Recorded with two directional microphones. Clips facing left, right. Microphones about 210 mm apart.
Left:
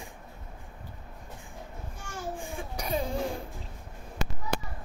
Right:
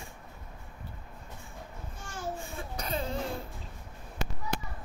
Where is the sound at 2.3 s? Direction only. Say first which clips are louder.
Left 2 dB; 15° left (ahead or behind).